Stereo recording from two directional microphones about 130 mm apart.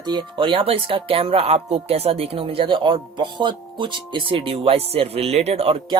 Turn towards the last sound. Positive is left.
turn(degrees=-50)  # may be behind; listen again after turning